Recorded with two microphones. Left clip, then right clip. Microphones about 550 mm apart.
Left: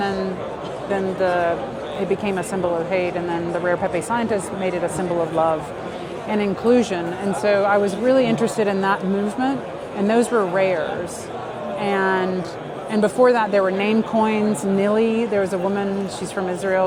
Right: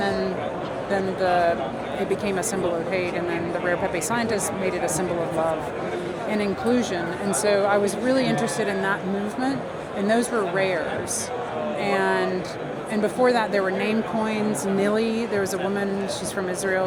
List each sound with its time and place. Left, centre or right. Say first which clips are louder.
1.2 s speech: left 1 dB; centre
3.7 s speech: left 3 dB; centre
6.4 s speech: left 7 dB; left
10.1 s speech: left 4 dB; left
11.8 s speech: left 3 dB; left